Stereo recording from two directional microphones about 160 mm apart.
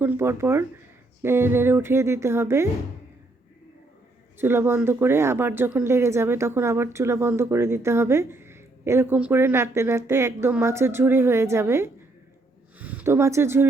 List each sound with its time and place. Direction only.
0.0 s speech: 15° right (ahead or behind)
4.4 s speech: 15° right (ahead or behind)